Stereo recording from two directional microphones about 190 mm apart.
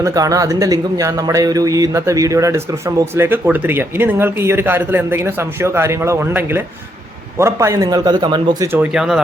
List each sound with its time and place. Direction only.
0.0 s a man's voice: 15° right (ahead or behind)
8.7 s speech: 5° right (ahead or behind)